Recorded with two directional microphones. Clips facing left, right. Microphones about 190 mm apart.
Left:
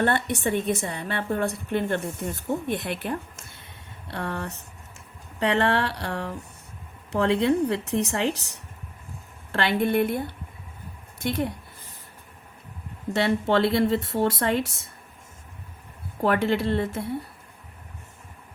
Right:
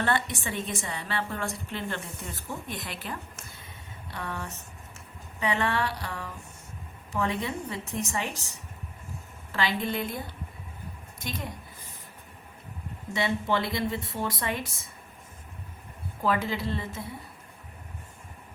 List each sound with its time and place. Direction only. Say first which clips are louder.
0.0 s a woman's voice: left 5 dB; 55° left (ahead or behind)
13.1 s speech: left 6 dB; 70° left (ahead or behind)
16.2 s speech: left 6 dB; 65° left (ahead or behind)